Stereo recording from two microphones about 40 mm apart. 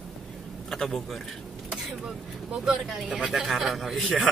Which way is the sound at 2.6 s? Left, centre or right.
Centre.